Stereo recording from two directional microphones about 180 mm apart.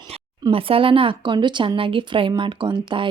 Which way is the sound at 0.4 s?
30° right (ahead or behind).